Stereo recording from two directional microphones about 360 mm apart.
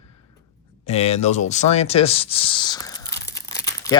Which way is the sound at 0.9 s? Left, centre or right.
Centre.